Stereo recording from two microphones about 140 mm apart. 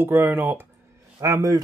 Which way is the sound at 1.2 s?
25° right (ahead or behind).